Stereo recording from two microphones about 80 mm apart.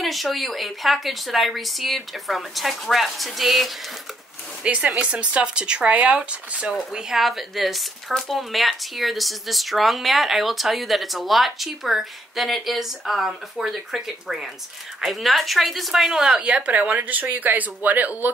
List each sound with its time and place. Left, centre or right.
0.0 s speech: centre
4.6 s speech: centre